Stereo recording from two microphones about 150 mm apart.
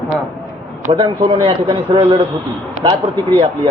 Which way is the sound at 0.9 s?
35° right (ahead or behind).